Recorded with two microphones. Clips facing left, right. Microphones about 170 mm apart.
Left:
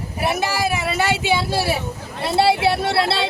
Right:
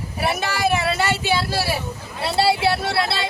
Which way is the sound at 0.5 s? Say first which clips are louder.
Right 1 dB; 15° left (ahead or behind).